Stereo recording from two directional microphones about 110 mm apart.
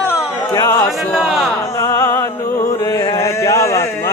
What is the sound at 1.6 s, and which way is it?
Music, 25° left (ahead or behind).